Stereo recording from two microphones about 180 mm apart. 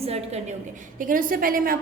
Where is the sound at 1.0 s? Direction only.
50° right (ahead or behind).